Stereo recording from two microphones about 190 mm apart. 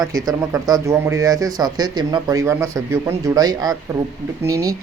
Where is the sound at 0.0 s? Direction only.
20° right (ahead or behind).